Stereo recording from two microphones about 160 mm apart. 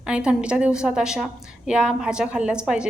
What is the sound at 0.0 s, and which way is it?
A woman's voice, 5° right (ahead or behind).